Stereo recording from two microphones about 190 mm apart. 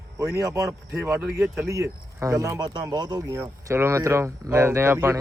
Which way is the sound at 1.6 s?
15° right (ahead or behind).